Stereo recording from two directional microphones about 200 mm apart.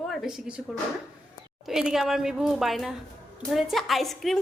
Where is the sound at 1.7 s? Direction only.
Centre (ahead or behind).